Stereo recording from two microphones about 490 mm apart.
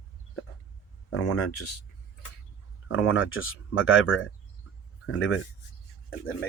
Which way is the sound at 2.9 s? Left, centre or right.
Left.